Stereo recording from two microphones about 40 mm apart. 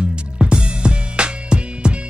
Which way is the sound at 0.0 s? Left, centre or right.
Right.